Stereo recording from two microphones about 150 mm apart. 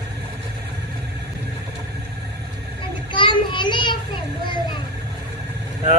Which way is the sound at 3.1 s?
35° left (ahead or behind).